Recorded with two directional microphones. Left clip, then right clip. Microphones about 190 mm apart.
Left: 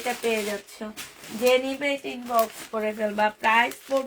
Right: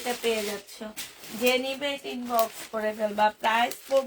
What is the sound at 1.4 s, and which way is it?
Speech, 45° left (ahead or behind).